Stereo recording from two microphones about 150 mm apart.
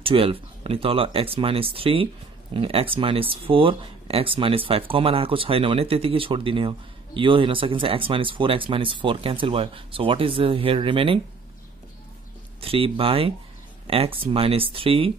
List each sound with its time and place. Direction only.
0.0 s speech: 40° right (ahead or behind)
12.5 s speech: 40° right (ahead or behind)